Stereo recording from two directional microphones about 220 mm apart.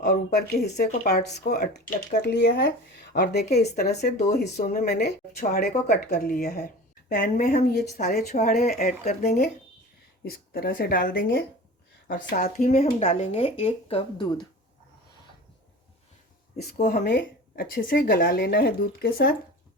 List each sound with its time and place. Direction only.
0.0 s a woman's voice: 45° left (ahead or behind)
8.3 s speech: 35° left (ahead or behind)
10.2 s a woman's voice: 45° left (ahead or behind); by 14.4 s 25° left (ahead or behind)
16.7 s speech: 35° left (ahead or behind)
17.0 s a woman's voice: 50° left (ahead or behind)